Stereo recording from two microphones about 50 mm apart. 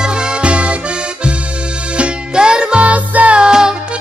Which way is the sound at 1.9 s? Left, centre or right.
Right.